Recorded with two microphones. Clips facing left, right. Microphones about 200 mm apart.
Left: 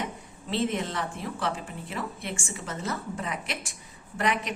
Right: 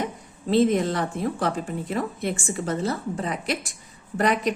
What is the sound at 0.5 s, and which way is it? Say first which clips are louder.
Speech: right 8 dB; 40° right (ahead or behind).